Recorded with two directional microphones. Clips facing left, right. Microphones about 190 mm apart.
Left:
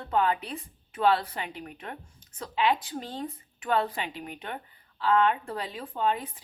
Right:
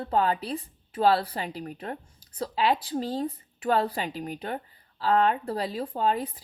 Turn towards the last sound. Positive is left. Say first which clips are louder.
# right 2 dB
turn(degrees=-35)  # may be behind; listen again after turning